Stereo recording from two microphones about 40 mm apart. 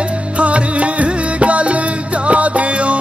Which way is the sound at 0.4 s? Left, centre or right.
Right.